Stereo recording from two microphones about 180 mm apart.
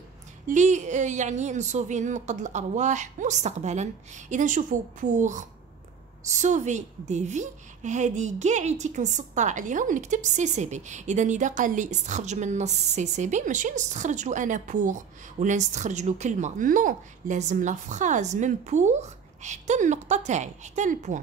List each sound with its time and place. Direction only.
0.5 s a woman's voice: 40° right (ahead or behind)